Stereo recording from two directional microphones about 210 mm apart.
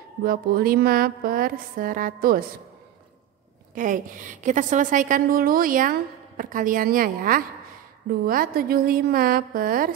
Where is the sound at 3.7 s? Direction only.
40° right (ahead or behind).